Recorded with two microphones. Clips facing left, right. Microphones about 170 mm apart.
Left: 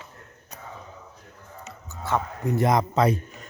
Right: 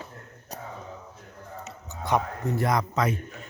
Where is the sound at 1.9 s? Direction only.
15° right (ahead or behind).